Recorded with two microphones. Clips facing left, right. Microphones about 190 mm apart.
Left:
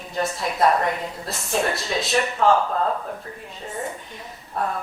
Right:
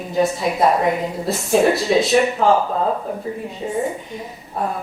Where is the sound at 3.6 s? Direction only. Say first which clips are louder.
Right 10 dB; 10° right (ahead or behind).